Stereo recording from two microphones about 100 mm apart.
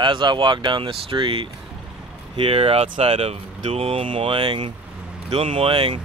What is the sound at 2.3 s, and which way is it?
Speech, 65° right (ahead or behind).